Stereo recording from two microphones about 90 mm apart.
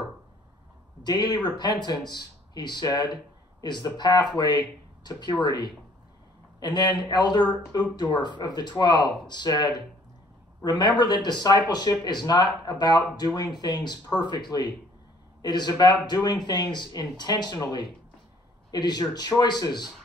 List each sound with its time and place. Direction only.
1.0 s speech: 50° left (ahead or behind)